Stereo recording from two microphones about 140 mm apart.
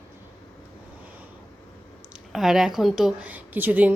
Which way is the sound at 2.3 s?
5° right (ahead or behind).